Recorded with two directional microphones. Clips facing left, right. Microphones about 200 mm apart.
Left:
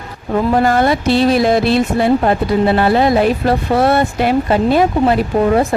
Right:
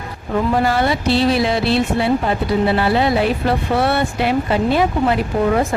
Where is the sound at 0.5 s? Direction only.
45° left (ahead or behind).